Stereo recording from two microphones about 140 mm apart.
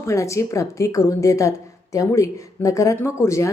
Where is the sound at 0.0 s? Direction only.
20° left (ahead or behind).